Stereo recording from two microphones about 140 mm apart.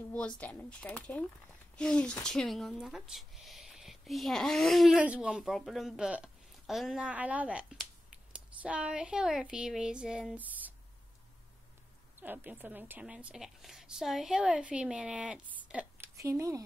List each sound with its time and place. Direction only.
0.4 s speech: 10° left (ahead or behind); by 10.7 s 10° right (ahead or behind)
12.2 s a woman's voice: 15° right (ahead or behind)
16.2 s speech: 20° right (ahead or behind)